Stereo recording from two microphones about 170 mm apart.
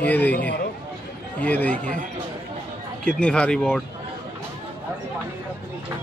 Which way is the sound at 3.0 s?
5° left (ahead or behind).